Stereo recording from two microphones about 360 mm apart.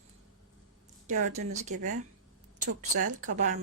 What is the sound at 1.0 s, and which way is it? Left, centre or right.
Speech, centre.